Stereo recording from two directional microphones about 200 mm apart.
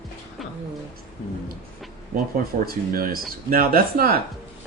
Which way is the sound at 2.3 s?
45° right (ahead or behind).